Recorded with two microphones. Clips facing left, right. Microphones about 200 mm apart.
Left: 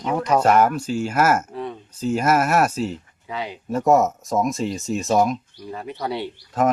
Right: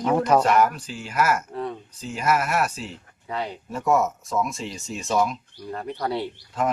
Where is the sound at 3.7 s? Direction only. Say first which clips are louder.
Left 5 dB; 40° left (ahead or behind).